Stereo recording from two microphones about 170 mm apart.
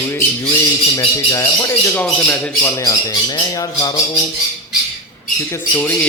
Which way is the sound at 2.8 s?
20° left (ahead or behind).